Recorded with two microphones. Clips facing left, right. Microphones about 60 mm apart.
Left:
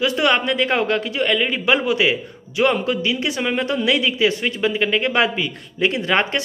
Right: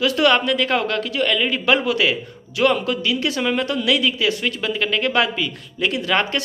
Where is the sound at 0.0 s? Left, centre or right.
Left.